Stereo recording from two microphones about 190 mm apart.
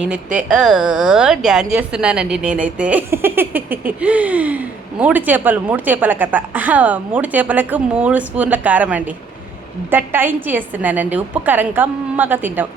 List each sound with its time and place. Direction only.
0.0 s a woman's voice: 5° right (ahead or behind)